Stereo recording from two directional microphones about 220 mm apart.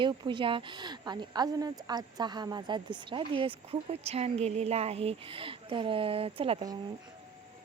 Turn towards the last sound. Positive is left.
turn(degrees=-20)  # may be behind; listen again after turning